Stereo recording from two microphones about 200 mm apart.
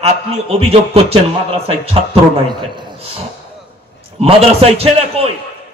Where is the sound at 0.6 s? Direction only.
30° right (ahead or behind).